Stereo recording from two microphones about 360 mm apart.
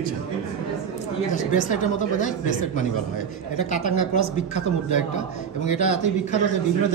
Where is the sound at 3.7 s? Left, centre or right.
Centre.